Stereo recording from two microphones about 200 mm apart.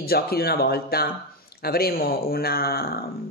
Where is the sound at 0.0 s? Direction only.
50° left (ahead or behind).